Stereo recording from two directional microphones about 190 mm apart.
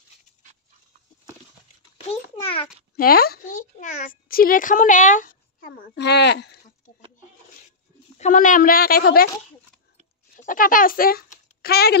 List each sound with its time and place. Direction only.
2.0 s a sound: 30° left (ahead or behind)
3.0 s a woman's voice: 50° left (ahead or behind)
8.2 s a woman's voice: 45° left (ahead or behind)
10.3 s speech: 45° left (ahead or behind)